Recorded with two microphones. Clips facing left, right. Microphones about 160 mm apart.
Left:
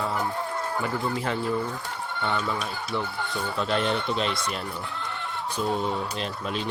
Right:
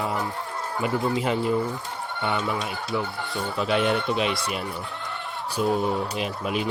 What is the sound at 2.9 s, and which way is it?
Speech, centre (ahead or behind).